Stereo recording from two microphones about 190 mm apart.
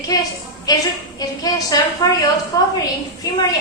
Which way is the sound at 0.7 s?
20° left (ahead or behind).